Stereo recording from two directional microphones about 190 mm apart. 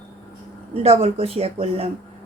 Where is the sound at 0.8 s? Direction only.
30° right (ahead or behind).